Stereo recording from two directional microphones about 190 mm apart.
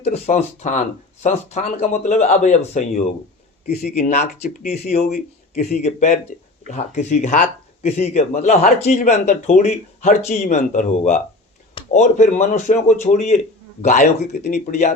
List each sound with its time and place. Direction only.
0.0 s speech: 35° left (ahead or behind)
5.0 s speech: 55° left (ahead or behind)
5.8 s speech: 40° left (ahead or behind)